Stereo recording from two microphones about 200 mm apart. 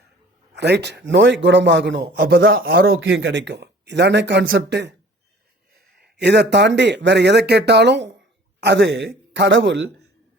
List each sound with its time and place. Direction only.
0.5 s speech: 60° right (ahead or behind)
2.0 s speech: 45° right (ahead or behind); by 10.1 s 65° right (ahead or behind)